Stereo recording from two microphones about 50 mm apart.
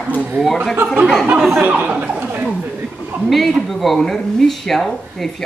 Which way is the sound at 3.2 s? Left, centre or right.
Centre.